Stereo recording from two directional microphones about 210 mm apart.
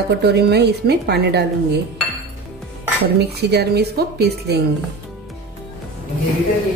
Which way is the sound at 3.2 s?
50° right (ahead or behind).